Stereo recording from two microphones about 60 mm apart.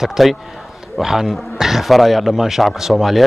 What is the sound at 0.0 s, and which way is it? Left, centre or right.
Speech, centre.